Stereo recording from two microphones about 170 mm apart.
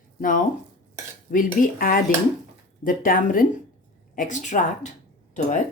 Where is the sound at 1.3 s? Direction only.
55° left (ahead or behind).